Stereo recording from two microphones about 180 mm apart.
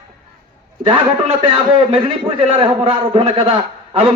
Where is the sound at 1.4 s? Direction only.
30° right (ahead or behind).